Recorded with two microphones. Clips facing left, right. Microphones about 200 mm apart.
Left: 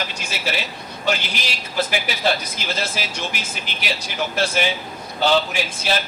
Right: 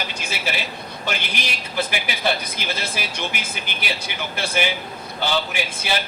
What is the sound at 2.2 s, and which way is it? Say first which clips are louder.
A man's voice: right 1 dB; 55° right (ahead or behind).